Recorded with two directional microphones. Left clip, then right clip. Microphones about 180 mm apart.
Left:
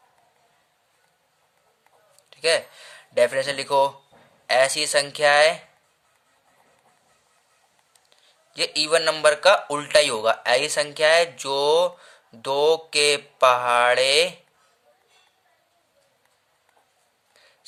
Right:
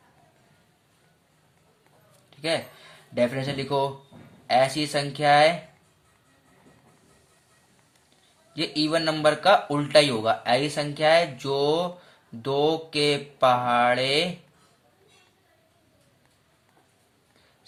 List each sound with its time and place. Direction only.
2.3 s speech: 50° left (ahead or behind)
8.5 s speech: 50° left (ahead or behind)